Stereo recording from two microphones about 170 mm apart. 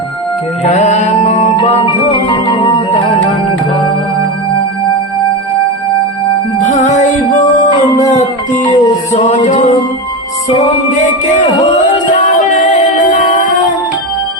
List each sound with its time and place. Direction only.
0.6 s music: 40° left (ahead or behind)
6.6 s music: 45° left (ahead or behind)
8.7 s music: 40° left (ahead or behind)
12.1 s music: 45° left (ahead or behind)